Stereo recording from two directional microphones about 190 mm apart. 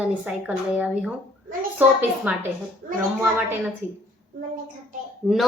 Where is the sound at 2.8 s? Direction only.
45° right (ahead or behind).